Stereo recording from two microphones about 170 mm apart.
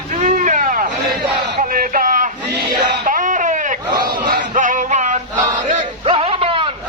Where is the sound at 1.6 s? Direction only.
55° right (ahead or behind).